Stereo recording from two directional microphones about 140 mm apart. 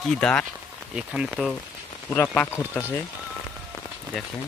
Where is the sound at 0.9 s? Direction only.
5° right (ahead or behind).